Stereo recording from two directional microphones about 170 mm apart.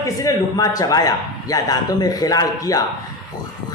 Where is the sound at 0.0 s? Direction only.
20° left (ahead or behind).